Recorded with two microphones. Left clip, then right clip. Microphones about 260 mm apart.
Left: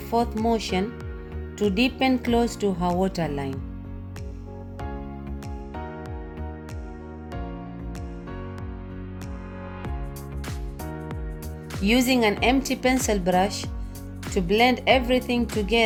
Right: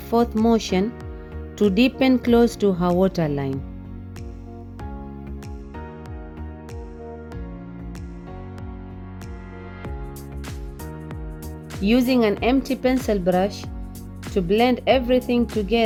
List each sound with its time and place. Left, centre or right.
0.1 s speech: right
11.9 s speech: right